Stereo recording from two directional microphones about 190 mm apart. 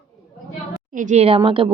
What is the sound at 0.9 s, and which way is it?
Speech, 40° right (ahead or behind).